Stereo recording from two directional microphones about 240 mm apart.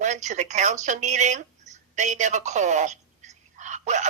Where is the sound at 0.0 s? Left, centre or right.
Right.